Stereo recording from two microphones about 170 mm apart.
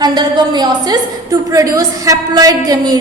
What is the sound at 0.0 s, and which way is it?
A woman's voice, 25° right (ahead or behind).